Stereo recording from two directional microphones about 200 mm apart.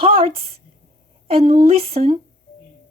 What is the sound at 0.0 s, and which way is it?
Speech, 30° right (ahead or behind).